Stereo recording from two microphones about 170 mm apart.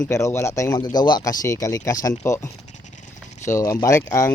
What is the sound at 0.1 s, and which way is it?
Speech, 15° left (ahead or behind).